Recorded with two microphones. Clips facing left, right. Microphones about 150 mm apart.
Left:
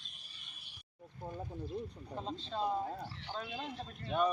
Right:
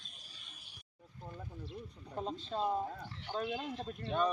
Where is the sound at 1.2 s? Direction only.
25° left (ahead or behind).